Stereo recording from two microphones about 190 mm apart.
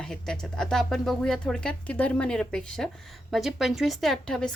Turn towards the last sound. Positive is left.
turn(degrees=5)  # may be behind; listen again after turning